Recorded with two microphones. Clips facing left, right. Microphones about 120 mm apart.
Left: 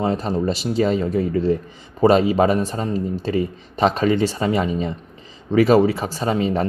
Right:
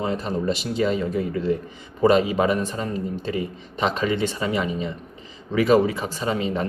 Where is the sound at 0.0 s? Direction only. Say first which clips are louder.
Left 4 dB; 35° left (ahead or behind).